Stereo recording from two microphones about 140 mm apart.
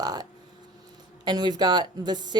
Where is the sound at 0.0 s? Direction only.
30° right (ahead or behind).